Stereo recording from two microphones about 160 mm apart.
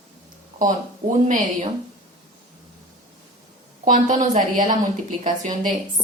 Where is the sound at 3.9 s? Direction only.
50° right (ahead or behind).